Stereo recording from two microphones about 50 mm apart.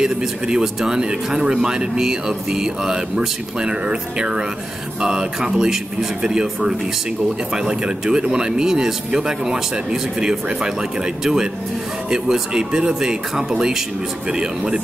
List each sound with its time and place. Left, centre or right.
0.0 s speech: centre